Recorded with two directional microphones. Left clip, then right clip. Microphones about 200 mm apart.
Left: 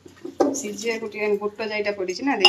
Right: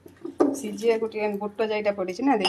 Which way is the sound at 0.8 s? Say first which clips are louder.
Right 4 dB; 40° right (ahead or behind).